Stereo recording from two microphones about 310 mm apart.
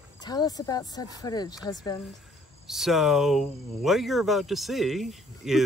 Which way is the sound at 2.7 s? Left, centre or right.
Centre.